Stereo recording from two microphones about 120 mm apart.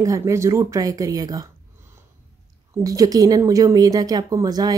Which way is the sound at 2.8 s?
30° right (ahead or behind).